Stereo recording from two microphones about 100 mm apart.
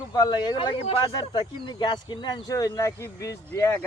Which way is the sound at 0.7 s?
90° left.